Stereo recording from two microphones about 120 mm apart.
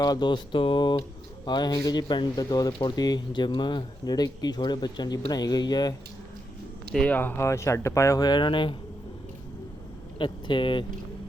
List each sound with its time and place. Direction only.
0.0 s speech: 35° left (ahead or behind)
6.9 s speech: 10° left (ahead or behind); by 8.7 s 45° left (ahead or behind)
10.2 s speech: 40° left (ahead or behind)